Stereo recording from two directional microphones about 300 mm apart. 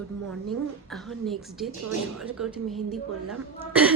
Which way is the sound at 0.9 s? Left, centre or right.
Centre.